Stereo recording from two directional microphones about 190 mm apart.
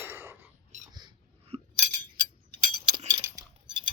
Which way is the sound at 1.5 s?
30° right (ahead or behind).